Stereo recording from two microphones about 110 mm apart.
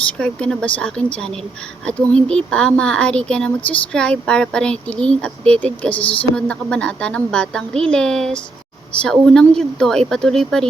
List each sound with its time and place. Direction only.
0.2 s speech: 5° left (ahead or behind)